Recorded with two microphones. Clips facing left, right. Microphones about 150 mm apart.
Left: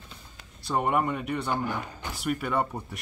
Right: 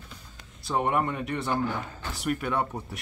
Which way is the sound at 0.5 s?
Centre (ahead or behind).